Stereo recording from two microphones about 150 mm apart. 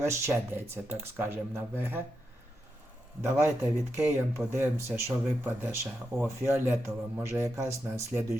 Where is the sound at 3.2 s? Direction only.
15° right (ahead or behind).